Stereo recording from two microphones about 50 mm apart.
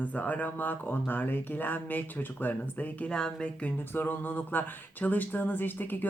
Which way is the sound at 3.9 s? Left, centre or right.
Left.